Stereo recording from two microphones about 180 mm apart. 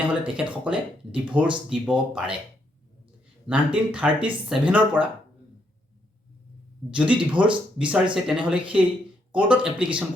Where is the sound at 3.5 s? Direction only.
5° right (ahead or behind).